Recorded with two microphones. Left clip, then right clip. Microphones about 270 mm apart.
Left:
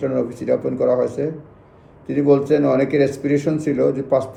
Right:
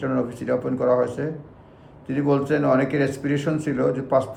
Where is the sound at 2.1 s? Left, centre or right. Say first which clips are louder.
Left 6 dB; centre.